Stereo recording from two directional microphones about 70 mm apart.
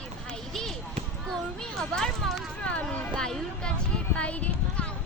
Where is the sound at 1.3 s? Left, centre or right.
Centre.